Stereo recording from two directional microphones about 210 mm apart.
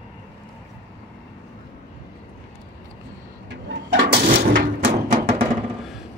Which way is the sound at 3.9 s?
40° right (ahead or behind).